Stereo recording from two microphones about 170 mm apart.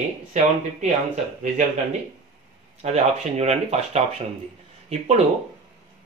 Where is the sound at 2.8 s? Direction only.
40° right (ahead or behind).